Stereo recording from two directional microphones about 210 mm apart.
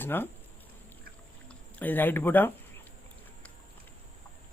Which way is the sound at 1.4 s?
10° left (ahead or behind).